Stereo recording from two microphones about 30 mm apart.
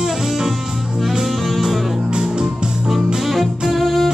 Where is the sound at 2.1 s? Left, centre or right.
Right.